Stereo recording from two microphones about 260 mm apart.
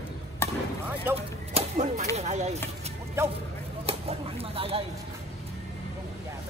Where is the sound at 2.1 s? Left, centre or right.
Right.